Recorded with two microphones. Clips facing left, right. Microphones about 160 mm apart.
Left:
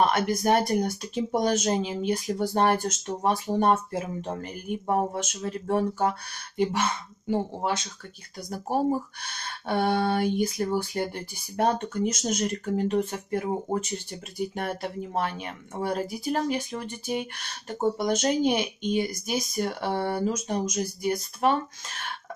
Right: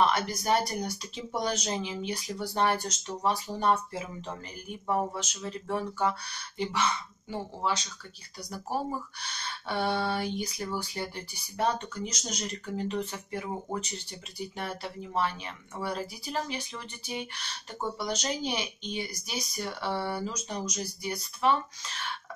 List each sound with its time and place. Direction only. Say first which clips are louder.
0.0 s speech: left 4 dB; 50° left (ahead or behind)
14.5 s speech: left 6 dB; 50° left (ahead or behind)